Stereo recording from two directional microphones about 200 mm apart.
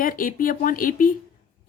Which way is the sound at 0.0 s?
45° left (ahead or behind).